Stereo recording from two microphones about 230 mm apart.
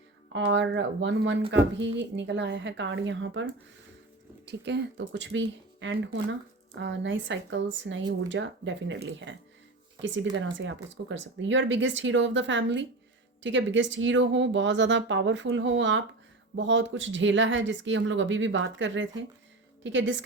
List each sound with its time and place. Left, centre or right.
0.3 s speech: right